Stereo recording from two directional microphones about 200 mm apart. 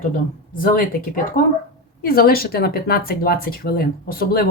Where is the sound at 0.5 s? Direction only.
45° left (ahead or behind).